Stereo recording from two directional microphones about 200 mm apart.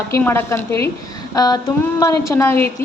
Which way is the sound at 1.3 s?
20° left (ahead or behind).